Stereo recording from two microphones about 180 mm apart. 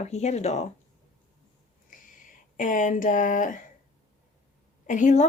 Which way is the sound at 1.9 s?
45° left (ahead or behind).